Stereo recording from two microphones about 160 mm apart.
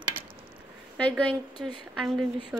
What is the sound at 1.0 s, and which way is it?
A woman's voice, 5° left (ahead or behind).